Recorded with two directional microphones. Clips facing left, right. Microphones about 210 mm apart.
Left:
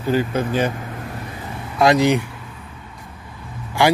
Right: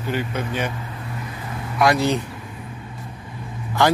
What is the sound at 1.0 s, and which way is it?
Vehicle, 45° left (ahead or behind).